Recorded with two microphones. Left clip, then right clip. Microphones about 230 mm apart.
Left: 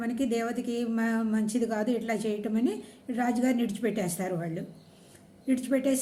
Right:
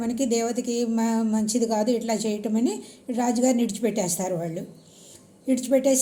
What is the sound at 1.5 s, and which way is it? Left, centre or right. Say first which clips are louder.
A woman's voice: right 7 dB; centre.